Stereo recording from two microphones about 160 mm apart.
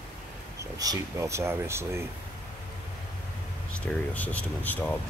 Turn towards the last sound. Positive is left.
turn(degrees=10)  # may be behind; listen again after turning